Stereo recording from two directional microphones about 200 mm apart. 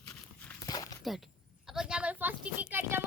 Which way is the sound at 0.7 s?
20° left (ahead or behind).